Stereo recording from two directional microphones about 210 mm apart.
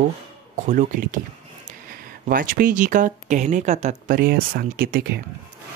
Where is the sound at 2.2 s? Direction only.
40° right (ahead or behind).